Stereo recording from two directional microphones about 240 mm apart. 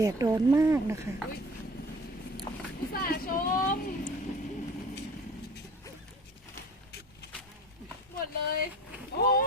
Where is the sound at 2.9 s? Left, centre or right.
Left.